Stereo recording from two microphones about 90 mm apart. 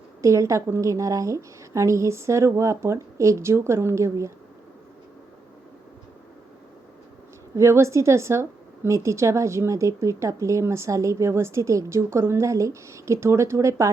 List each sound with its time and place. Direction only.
0.2 s a woman's voice: 35° right (ahead or behind)
7.5 s a woman's voice: 35° right (ahead or behind)